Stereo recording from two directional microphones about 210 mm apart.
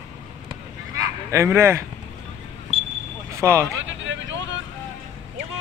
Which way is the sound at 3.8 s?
60° right (ahead or behind).